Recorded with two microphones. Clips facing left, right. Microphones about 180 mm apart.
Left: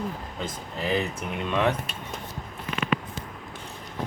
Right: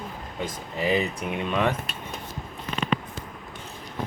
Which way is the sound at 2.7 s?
30° right (ahead or behind).